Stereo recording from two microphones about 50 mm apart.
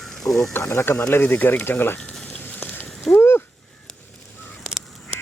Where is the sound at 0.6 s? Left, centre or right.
Left.